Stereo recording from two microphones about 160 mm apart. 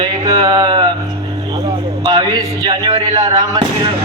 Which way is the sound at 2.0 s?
25° right (ahead or behind).